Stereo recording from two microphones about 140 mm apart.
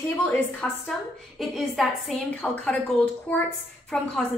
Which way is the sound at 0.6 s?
10° left (ahead or behind).